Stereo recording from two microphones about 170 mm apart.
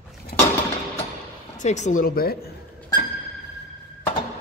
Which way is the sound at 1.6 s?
45° left (ahead or behind).